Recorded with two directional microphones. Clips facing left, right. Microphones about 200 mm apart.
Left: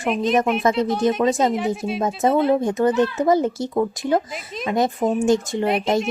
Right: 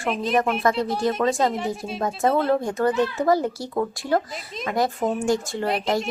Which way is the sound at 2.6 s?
20° left (ahead or behind).